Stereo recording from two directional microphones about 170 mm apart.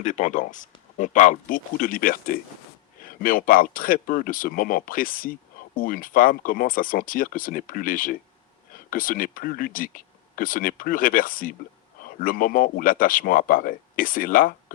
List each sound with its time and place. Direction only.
0.0 s speech: 45° left (ahead or behind)